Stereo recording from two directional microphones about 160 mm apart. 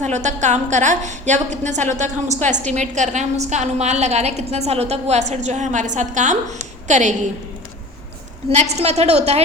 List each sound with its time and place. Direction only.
0.0 s a woman's voice: 45° right (ahead or behind)
8.4 s a woman's voice: 45° right (ahead or behind)